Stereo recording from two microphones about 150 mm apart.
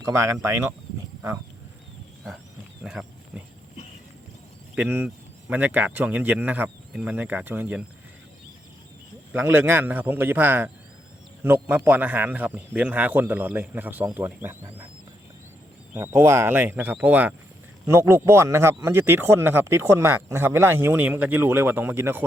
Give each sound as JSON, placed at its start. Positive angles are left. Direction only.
{"t": 0.0, "sound": "speech", "side_deg": -20}
{"t": 2.8, "sound": "speech", "side_deg": -5}
{"t": 4.7, "sound": "a man's voice", "side_deg": -10}
{"t": 9.3, "sound": "a man's voice", "side_deg": -15}
{"t": 15.9, "sound": "a man's voice", "side_deg": -15}